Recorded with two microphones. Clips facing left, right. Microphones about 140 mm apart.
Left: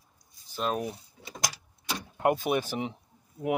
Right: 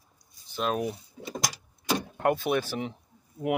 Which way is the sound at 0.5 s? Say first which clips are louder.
Right 2 dB; centre (ahead or behind).